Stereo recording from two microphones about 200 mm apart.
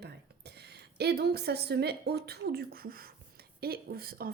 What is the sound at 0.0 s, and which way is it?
A woman's voice, 55° right (ahead or behind).